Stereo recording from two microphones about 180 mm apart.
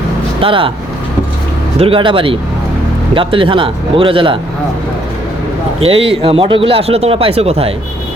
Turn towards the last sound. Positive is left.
turn(degrees=-35)  # may be behind; listen again after turning